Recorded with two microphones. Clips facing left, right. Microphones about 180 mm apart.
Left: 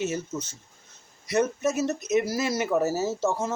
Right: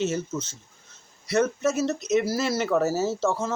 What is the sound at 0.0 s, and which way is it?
Speech, 15° left (ahead or behind).